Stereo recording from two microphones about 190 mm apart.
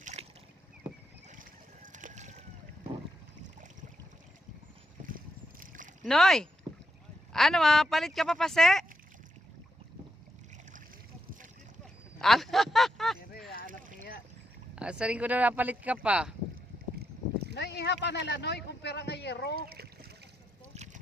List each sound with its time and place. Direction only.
0.0 s boat: 40° right (ahead or behind)
1.3 s a sound: 45° right (ahead or behind)
5.0 s boat: 45° right (ahead or behind)
6.1 s speech: centre (ahead or behind)
12.2 s a sound: centre (ahead or behind)
14.8 s speech: 5° right (ahead or behind)
17.5 s speech: 65° left (ahead or behind)
19.5 s speech: 55° right (ahead or behind)
20.7 s a sound: 40° right (ahead or behind)